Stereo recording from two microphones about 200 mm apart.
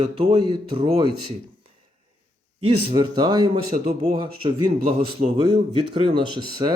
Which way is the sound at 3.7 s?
35° right (ahead or behind).